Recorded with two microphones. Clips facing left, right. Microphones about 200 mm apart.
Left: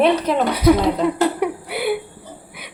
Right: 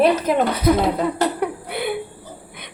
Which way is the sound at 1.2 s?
5° left (ahead or behind).